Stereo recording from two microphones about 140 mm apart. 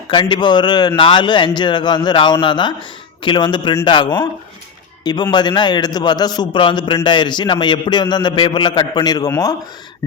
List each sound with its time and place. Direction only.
0.1 s a man's voice: 35° left (ahead or behind)